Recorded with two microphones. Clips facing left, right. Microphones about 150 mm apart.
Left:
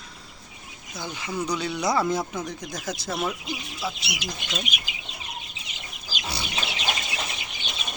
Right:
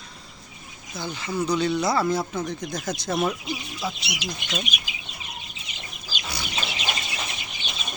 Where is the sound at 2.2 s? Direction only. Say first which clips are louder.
Right 2 dB; 5° right (ahead or behind).